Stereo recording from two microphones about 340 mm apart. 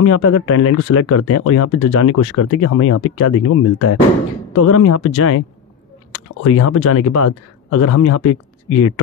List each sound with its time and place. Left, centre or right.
0.0 s speech: left